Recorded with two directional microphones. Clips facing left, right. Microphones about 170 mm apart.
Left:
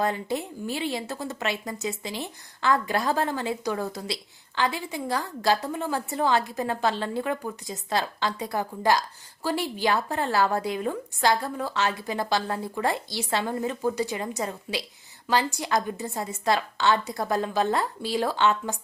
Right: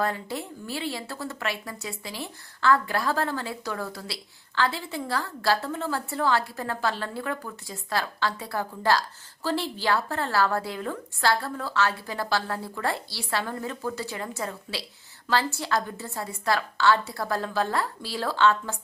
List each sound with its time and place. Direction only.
0.0 s speech: 20° left (ahead or behind)